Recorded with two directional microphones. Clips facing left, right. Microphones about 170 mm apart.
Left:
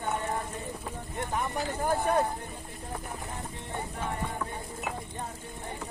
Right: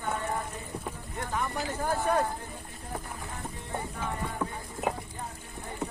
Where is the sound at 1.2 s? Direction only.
20° left (ahead or behind).